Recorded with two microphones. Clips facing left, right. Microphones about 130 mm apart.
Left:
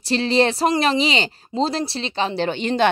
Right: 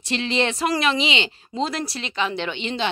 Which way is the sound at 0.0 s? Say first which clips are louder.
Left 5 dB; 35° left (ahead or behind).